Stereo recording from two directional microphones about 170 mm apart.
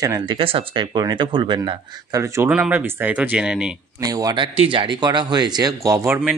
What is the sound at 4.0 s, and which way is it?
Speech, 20° right (ahead or behind).